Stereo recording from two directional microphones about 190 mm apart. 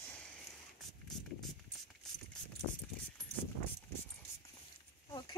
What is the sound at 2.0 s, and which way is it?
Mechanisms, centre (ahead or behind).